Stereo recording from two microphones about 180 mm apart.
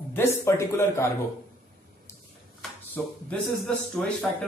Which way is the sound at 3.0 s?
10° left (ahead or behind).